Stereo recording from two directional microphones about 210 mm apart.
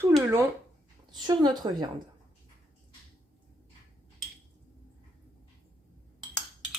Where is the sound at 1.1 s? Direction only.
20° right (ahead or behind).